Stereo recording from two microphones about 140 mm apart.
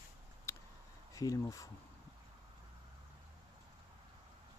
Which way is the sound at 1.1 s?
25° left (ahead or behind).